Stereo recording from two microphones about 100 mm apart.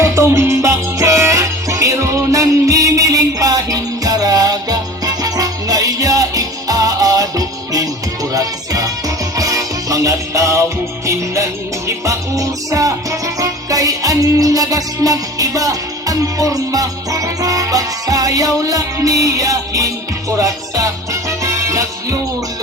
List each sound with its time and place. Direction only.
0.0 s music: 30° right (ahead or behind)